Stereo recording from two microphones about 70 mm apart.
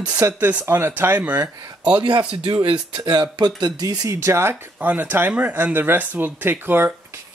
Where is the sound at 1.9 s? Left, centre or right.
Right.